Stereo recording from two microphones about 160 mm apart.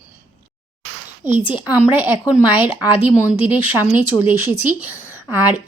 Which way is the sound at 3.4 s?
35° left (ahead or behind).